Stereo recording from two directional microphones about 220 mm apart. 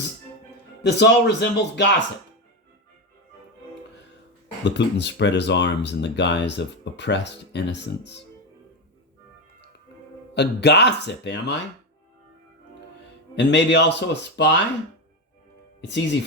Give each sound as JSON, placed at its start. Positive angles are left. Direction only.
{"t": 0.8, "sound": "speech", "side_deg": 50}
{"t": 4.6, "sound": "speech", "side_deg": 50}
{"t": 10.3, "sound": "speech", "side_deg": 50}
{"t": 13.3, "sound": "speech", "side_deg": 55}
{"t": 15.8, "sound": "speech", "side_deg": 50}